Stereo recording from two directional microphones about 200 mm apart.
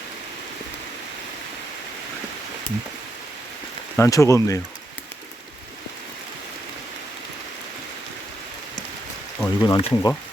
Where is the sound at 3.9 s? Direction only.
15° left (ahead or behind).